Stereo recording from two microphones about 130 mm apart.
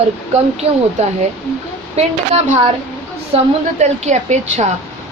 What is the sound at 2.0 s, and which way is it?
A woman's voice, 55° right (ahead or behind).